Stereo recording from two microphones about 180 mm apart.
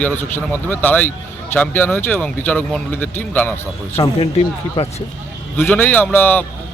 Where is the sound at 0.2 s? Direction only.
10° left (ahead or behind).